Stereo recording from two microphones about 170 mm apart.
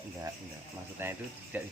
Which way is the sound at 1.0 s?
15° right (ahead or behind).